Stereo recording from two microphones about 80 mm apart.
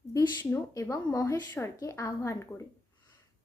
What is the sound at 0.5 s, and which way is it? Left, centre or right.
A woman's voice, left.